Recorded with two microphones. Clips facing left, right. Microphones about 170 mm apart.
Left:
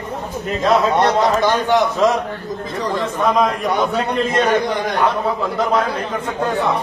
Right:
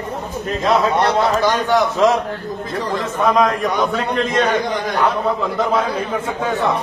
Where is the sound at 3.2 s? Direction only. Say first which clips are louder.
Right 1 dB; centre (ahead or behind).